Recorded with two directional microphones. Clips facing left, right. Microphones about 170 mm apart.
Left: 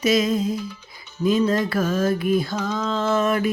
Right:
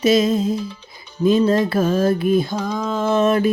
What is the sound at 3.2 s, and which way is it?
Mantra, 30° right (ahead or behind).